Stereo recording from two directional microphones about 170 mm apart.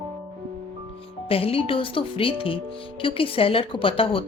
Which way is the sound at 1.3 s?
35° left (ahead or behind).